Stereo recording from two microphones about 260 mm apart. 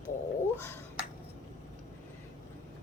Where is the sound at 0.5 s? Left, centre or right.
Centre.